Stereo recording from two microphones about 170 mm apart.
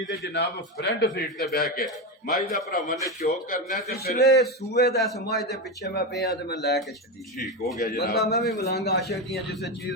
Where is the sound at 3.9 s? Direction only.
70° left (ahead or behind).